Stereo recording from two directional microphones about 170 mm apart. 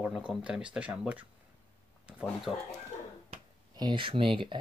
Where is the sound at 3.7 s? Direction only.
25° right (ahead or behind).